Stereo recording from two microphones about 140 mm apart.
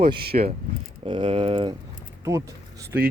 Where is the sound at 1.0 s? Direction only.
35° right (ahead or behind).